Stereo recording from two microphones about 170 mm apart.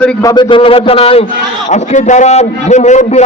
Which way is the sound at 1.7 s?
45° left (ahead or behind).